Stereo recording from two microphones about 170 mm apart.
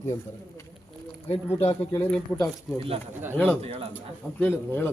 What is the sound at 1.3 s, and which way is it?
Speech, 35° left (ahead or behind).